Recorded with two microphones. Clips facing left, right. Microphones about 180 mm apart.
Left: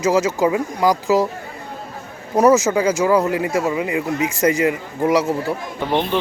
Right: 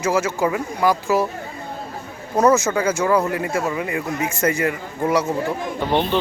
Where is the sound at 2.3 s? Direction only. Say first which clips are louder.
Left 3 dB; 15° left (ahead or behind).